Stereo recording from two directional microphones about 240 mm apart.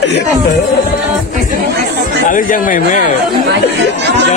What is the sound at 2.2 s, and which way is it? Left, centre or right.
Speech, left.